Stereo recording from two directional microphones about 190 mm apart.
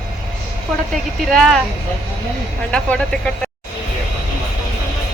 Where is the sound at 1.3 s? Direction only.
Centre (ahead or behind).